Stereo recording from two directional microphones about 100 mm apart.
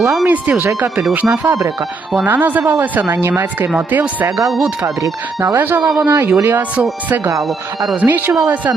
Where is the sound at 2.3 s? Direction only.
15° right (ahead or behind).